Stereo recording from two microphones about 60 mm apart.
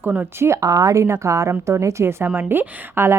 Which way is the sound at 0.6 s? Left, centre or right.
Right.